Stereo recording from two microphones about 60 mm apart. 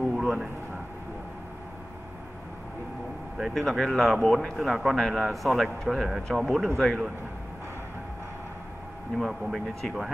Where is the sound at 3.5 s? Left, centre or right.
Centre.